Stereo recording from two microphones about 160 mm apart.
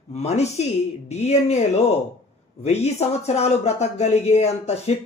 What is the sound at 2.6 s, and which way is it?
Speech, 40° left (ahead or behind).